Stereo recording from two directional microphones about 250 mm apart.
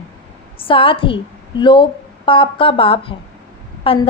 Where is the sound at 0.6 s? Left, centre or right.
Left.